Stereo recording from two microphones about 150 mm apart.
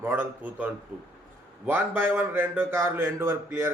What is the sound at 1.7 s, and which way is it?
Speech, 15° right (ahead or behind).